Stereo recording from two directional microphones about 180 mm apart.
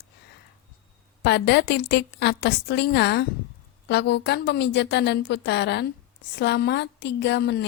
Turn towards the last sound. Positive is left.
turn(degrees=70)  # may be behind; listen again after turning